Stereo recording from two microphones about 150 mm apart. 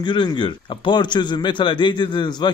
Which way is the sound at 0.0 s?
30° left (ahead or behind).